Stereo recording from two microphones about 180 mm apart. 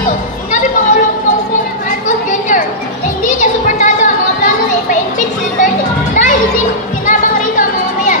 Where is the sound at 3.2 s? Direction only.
45° left (ahead or behind).